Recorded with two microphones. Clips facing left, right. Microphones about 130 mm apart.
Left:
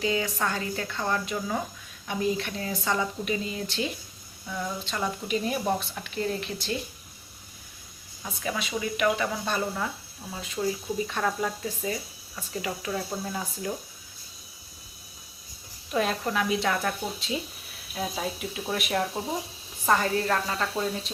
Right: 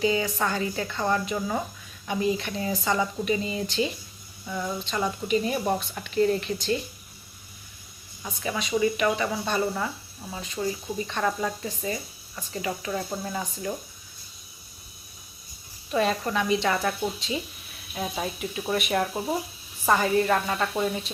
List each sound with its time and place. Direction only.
0.0 s speech: centre (ahead or behind)
8.2 s speech: centre (ahead or behind)
15.9 s speech: centre (ahead or behind)